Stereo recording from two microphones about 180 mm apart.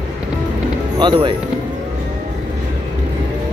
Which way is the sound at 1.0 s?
25° right (ahead or behind).